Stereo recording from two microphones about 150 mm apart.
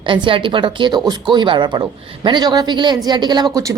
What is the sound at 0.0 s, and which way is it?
A woman's voice, 35° right (ahead or behind).